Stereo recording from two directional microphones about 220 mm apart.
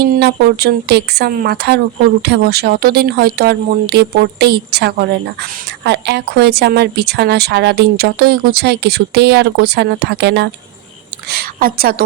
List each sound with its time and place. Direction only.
0.0 s a woman's voice: 50° right (ahead or behind)